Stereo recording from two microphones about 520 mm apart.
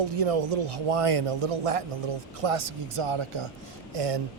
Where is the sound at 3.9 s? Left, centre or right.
Right.